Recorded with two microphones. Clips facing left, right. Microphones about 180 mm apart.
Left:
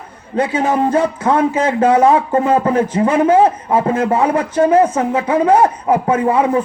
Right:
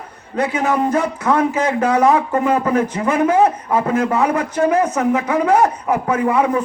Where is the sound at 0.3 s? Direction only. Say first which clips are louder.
Left 2 dB; 30° left (ahead or behind).